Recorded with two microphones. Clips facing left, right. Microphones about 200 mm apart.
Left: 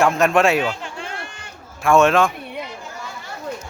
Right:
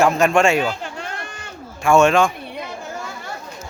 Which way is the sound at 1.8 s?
Centre (ahead or behind).